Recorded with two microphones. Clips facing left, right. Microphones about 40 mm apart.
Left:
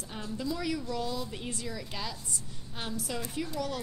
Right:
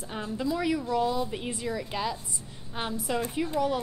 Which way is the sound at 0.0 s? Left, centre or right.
Right.